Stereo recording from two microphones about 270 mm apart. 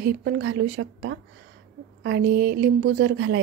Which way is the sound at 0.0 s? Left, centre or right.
Right.